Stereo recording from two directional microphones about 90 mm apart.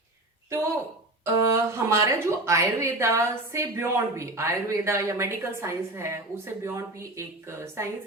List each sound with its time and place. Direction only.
1.2 s a woman's voice: 30° right (ahead or behind)